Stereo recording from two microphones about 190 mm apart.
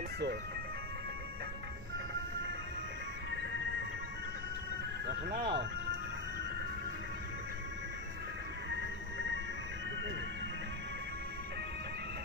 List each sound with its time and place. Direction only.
5.0 s speech: 55° right (ahead or behind)
8.6 s music: 70° right (ahead or behind)